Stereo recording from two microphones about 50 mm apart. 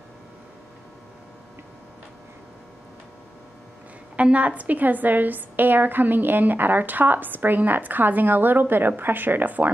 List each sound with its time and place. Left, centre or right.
4.2 s a woman's voice: right